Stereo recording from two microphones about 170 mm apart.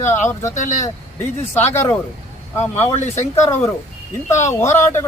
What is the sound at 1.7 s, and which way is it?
Speech, 15° left (ahead or behind).